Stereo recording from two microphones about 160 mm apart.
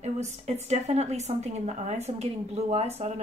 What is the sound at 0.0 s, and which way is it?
A woman's voice, 45° right (ahead or behind).